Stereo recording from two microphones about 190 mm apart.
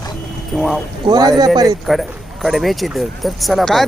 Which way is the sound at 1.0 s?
20° right (ahead or behind).